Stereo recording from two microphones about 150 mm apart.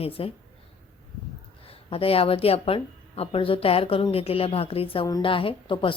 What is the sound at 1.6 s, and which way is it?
Speech, 40° left (ahead or behind).